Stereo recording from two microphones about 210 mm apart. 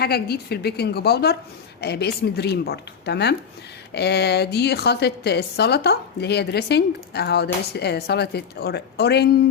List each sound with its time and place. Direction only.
0.0 s a woman's voice: 50° left (ahead or behind)